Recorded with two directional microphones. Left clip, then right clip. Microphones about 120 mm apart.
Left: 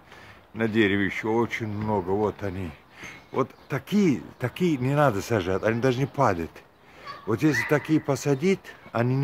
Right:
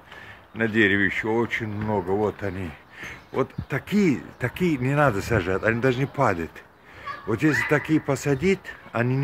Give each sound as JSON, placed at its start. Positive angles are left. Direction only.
{"t": 0.6, "sound": "speech", "side_deg": 25}
{"t": 1.5, "sound": "speech", "side_deg": 30}
{"t": 1.9, "sound": "speech", "side_deg": 20}
{"t": 5.4, "sound": "speech", "side_deg": 30}
{"t": 6.1, "sound": "speech", "side_deg": 20}